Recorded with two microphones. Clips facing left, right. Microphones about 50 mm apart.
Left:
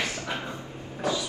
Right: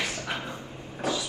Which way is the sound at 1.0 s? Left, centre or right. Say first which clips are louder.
Left 1 dB; right.